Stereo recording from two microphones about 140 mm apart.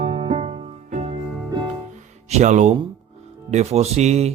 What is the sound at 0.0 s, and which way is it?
Music, 45° right (ahead or behind).